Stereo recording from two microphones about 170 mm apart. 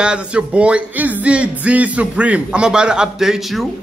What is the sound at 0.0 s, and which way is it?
A man's voice, 5° right (ahead or behind).